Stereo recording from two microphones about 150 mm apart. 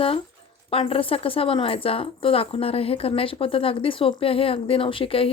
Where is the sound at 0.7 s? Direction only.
40° left (ahead or behind).